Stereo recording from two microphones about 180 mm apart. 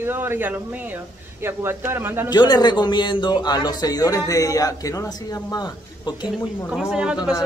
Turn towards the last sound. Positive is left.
turn(degrees=-5)  # may be behind; listen again after turning